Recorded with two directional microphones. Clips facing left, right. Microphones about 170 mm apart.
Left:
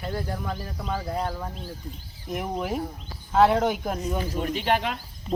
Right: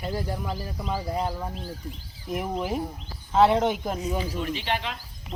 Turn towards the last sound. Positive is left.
turn(degrees=50)  # may be behind; listen again after turning